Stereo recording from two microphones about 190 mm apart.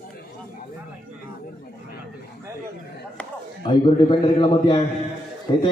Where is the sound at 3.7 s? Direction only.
25° left (ahead or behind).